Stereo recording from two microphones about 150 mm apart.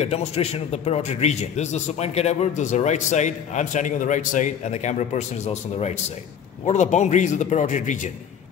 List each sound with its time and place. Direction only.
0.0 s a man's voice: 45° left (ahead or behind)